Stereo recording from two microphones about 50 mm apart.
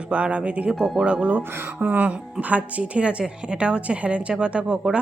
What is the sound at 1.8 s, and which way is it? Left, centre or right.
A woman's voice, right.